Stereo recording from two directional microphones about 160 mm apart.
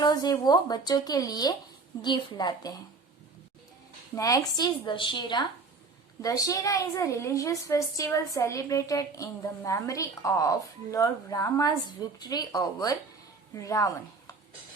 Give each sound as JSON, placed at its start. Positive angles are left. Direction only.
{"t": 0.0, "sound": "a woman's voice", "side_deg": 25}
{"t": 4.1, "sound": "a woman's voice", "side_deg": 20}